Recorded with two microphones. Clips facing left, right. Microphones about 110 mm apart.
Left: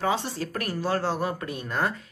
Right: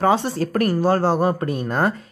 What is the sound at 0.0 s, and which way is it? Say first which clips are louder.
Speech: right 8 dB; 50° right (ahead or behind).